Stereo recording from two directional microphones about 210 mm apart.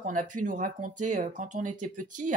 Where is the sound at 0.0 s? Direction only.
40° right (ahead or behind).